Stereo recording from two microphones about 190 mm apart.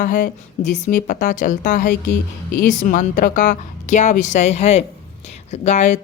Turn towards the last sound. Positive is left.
turn(degrees=35)  # may be behind; listen again after turning